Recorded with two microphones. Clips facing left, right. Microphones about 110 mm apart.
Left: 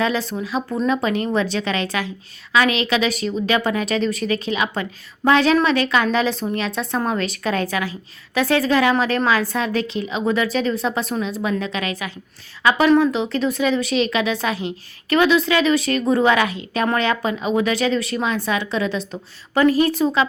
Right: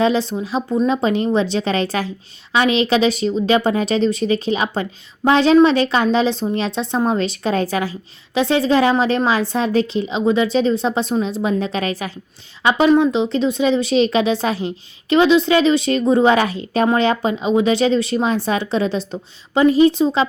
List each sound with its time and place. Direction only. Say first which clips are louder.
0.0 s a woman's voice: right 4 dB; 30° right (ahead or behind)
12.8 s a woman's voice: right 3 dB; 25° right (ahead or behind)